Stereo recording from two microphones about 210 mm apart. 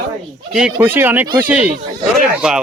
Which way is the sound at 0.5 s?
5° right (ahead or behind).